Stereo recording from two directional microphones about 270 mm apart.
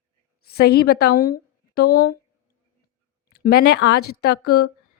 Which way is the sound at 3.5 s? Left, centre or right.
Left.